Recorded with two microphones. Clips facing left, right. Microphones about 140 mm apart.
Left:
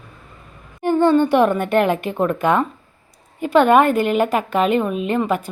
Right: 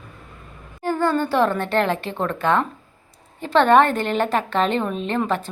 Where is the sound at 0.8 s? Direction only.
20° left (ahead or behind).